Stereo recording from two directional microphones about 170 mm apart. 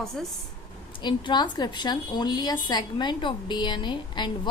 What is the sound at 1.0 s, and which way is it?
A woman's voice, 25° left (ahead or behind).